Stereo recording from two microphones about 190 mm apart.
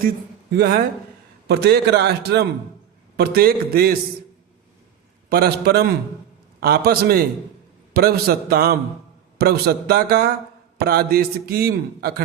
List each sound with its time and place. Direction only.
0.5 s a man's voice: 55° right (ahead or behind)
5.3 s a man's voice: 55° right (ahead or behind)